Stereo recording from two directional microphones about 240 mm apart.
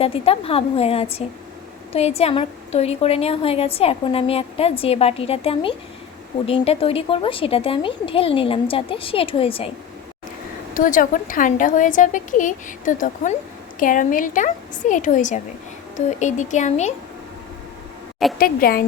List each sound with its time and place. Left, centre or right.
0.0 s a woman's voice: left
10.8 s a woman's voice: left
18.3 s a woman's voice: left